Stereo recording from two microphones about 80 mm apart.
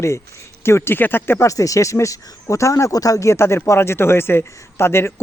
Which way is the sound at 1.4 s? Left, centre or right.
Left.